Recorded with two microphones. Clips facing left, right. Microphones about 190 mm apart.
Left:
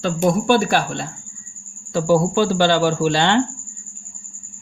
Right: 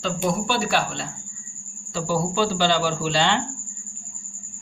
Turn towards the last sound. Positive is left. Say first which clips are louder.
# left 5 dB
turn(degrees=60)  # may be behind; listen again after turning